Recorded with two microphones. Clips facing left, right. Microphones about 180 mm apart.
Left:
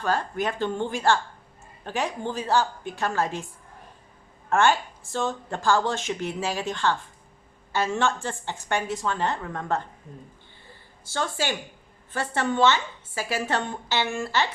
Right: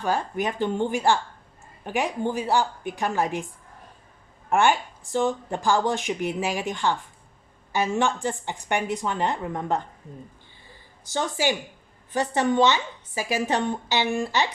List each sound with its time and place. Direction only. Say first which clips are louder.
0.0 s speech: right 1 dB; 15° right (ahead or behind)
4.4 s speech: even; 15° right (ahead or behind)
11.0 s speech: right 3 dB; 15° right (ahead or behind)